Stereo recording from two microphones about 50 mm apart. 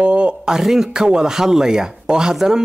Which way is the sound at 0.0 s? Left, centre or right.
Right.